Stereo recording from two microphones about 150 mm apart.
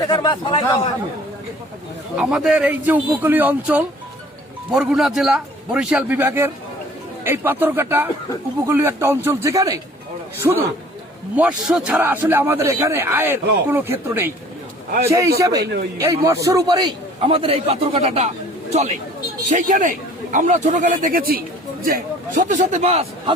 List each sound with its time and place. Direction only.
0.1 s a man's voice: 30° left (ahead or behind)
2.1 s a man's voice: 5° right (ahead or behind); by 10.6 s 20° right (ahead or behind)
11.3 s a man's voice: 5° right (ahead or behind)
15.4 s a man's voice: 25° right (ahead or behind); by 23.3 s 45° right (ahead or behind)